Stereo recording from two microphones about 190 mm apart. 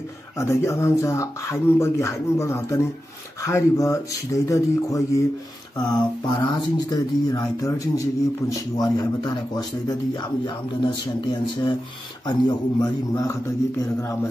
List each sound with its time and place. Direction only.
0.4 s speech: 15° left (ahead or behind)